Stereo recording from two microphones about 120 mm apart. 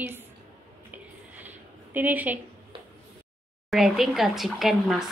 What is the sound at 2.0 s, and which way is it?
Speech, 15° right (ahead or behind).